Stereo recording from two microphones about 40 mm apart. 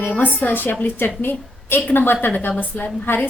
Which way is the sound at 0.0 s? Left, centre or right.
Left.